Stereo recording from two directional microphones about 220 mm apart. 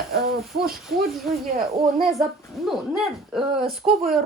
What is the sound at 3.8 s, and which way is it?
Speech, 20° right (ahead or behind).